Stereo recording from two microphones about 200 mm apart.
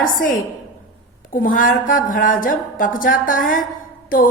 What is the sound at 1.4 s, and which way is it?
A woman's voice, 45° left (ahead or behind).